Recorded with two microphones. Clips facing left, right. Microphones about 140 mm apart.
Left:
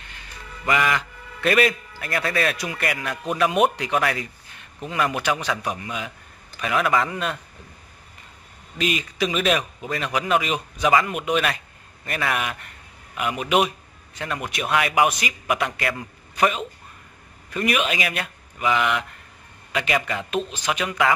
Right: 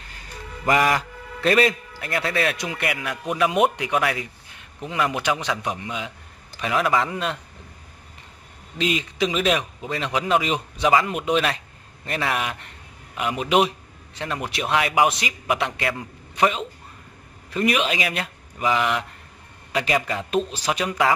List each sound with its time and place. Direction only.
0.0 s music: 40° right (ahead or behind)
2.0 s speech: 20° right (ahead or behind)
8.7 s a man's voice: 25° right (ahead or behind)